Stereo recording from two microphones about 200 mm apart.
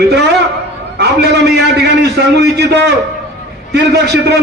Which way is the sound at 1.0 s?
55° right (ahead or behind).